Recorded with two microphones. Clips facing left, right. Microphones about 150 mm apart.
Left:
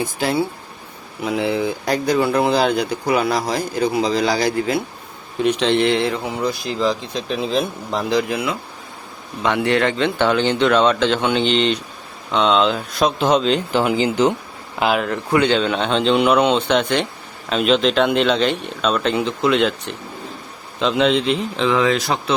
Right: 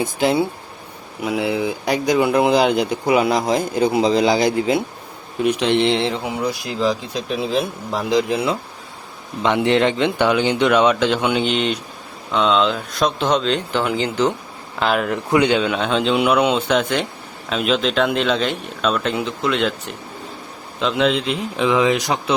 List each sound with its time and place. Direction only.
0.0 s speech: 20° right (ahead or behind)
1.2 s speech: 10° right (ahead or behind)
5.8 s speech: 25° right (ahead or behind)
6.2 s speech: 10° right (ahead or behind)
8.3 s speech: 30° right (ahead or behind); by 15.1 s 5° left (ahead or behind)
15.1 s speech: 15° right (ahead or behind)